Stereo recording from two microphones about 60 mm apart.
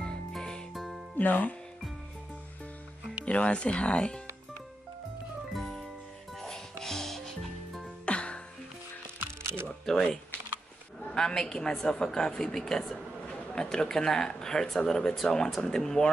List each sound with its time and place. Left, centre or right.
0.3 s music: centre
0.7 s music: centre
1.1 s speech: left
3.3 s speech: centre
5.5 s music: centre
8.0 s music: centre
9.2 s music: right
11.1 s a woman's voice: centre